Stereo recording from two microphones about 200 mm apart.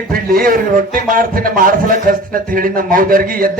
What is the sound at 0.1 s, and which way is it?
A man's voice, 45° right (ahead or behind).